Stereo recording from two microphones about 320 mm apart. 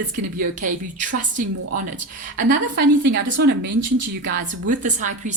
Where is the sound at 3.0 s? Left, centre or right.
Right.